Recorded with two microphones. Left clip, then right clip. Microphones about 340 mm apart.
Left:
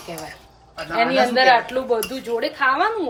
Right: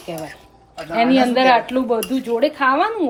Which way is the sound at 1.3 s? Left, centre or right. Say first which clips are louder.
Right 1 dB; centre.